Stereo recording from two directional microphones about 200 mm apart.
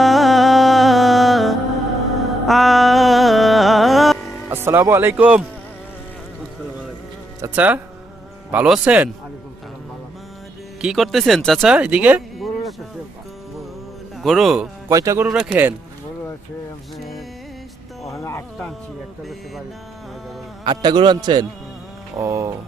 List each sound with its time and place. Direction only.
0.0 s music: centre (ahead or behind)
4.4 s speech: 10° right (ahead or behind)
7.4 s speech: 10° right (ahead or behind)
10.8 s speech: centre (ahead or behind)
14.2 s a man's voice: centre (ahead or behind)
14.8 s speech: 15° right (ahead or behind)
17.0 s music: centre (ahead or behind)
18.1 s speech: 15° left (ahead or behind)
20.7 s a man's voice: 20° right (ahead or behind)